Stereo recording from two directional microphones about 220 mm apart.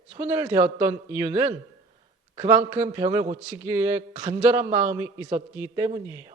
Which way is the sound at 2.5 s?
10° right (ahead or behind).